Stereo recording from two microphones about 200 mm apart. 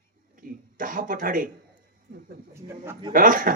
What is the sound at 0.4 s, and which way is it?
Cough, 45° right (ahead or behind).